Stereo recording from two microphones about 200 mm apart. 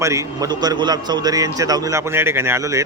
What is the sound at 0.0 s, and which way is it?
Speech, 15° right (ahead or behind).